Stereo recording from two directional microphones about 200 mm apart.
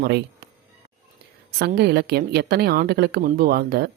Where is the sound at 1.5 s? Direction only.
50° right (ahead or behind).